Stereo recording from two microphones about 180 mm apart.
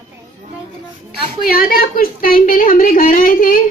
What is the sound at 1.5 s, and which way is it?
Speech, 55° left (ahead or behind).